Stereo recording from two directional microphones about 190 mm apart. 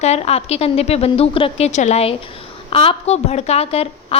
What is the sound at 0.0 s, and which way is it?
A woman's voice, 35° left (ahead or behind).